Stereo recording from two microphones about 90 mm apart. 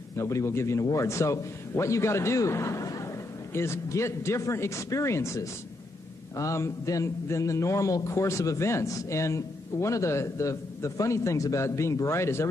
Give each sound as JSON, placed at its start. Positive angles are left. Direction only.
{"t": 0.2, "sound": "a man's voice", "side_deg": 30}